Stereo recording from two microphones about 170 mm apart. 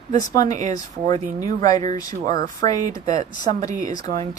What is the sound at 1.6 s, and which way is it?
Speech, 25° left (ahead or behind).